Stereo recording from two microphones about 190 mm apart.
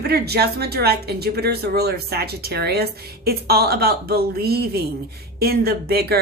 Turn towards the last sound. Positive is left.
turn(degrees=-55)  # may be behind; listen again after turning